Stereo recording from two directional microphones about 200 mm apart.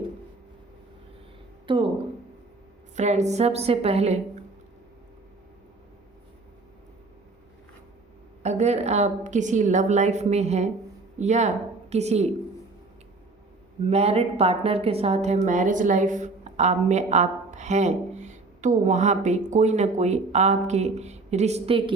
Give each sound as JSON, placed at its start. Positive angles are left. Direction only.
{"t": 1.6, "sound": "speech", "side_deg": -25}
{"t": 2.9, "sound": "a woman's voice", "side_deg": -35}
{"t": 8.4, "sound": "a woman's voice", "side_deg": -35}
{"t": 13.8, "sound": "a woman's voice", "side_deg": -30}